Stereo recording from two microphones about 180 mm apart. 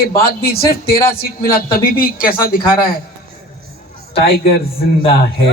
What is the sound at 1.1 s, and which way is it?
A man's voice, 55° left (ahead or behind).